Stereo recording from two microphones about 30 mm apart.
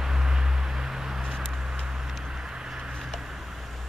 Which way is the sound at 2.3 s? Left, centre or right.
Right.